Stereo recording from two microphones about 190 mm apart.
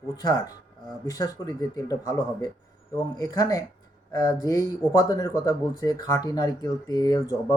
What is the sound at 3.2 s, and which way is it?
Speech, 20° left (ahead or behind).